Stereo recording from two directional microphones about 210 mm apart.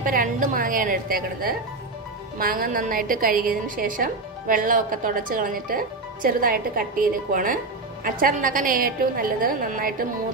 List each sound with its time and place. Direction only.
0.0 s a woman's voice: 40° right (ahead or behind)